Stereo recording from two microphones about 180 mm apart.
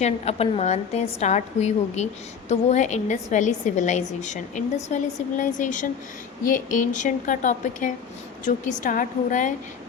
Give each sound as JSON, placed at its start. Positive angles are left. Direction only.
{"t": 0.0, "sound": "a woman's voice", "side_deg": 35}